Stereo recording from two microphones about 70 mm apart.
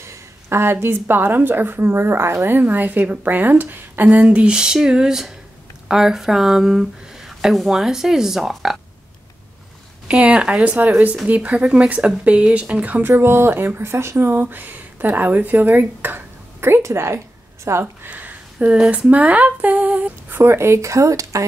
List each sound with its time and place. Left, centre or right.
0.0 s a woman's voice: right; by 8.7 s centre
10.0 s a woman's voice: centre
12.8 s a woman's voice: right
13.1 s speech: right
18.1 s a sound: right
18.9 s a woman's voice: centre
20.2 s speech: right